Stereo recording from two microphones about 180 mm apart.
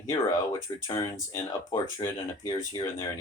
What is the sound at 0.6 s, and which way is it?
Speech, 15° left (ahead or behind).